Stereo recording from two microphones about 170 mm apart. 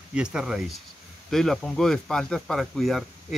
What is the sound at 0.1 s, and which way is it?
Speech, 5° right (ahead or behind).